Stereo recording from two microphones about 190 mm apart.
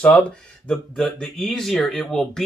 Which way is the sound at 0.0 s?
5° left (ahead or behind).